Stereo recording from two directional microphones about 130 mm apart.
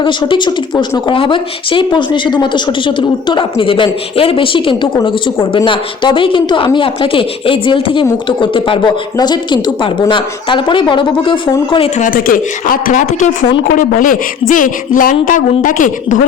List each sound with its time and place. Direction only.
0.0 s speech: 40° left (ahead or behind)
11.9 s a man's voice: 90° left
13.7 s speech: 90° left